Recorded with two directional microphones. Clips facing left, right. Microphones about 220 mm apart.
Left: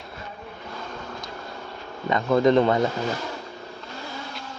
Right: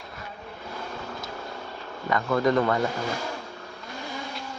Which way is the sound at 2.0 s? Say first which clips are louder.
Left 4 dB; 20° left (ahead or behind).